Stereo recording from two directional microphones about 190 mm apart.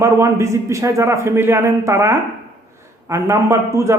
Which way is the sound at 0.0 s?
15° right (ahead or behind).